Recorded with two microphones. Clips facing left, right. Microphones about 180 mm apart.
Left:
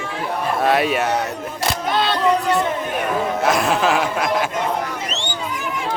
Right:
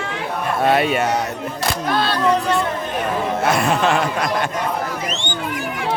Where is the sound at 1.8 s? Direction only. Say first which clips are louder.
Even; 20° left (ahead or behind).